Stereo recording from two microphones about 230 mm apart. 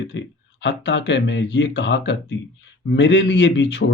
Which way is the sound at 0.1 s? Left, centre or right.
Left.